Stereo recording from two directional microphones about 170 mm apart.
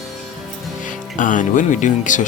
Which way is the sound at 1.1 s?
50° left (ahead or behind).